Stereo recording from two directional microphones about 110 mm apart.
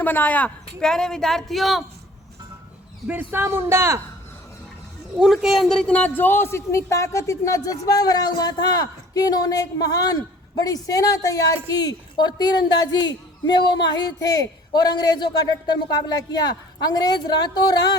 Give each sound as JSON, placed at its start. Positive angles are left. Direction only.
{"t": 0.0, "sound": "speech", "side_deg": 15}
{"t": 3.1, "sound": "speech", "side_deg": -20}
{"t": 5.1, "sound": "a woman's voice", "side_deg": -5}